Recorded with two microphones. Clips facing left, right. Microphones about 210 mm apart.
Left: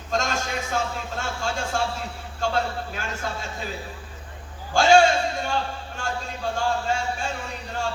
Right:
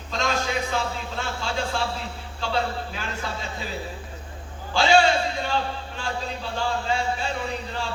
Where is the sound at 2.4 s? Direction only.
45° left (ahead or behind).